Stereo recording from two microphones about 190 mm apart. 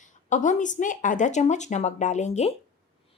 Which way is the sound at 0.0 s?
40° left (ahead or behind).